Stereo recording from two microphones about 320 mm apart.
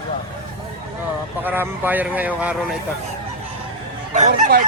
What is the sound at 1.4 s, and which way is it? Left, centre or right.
Speech, centre.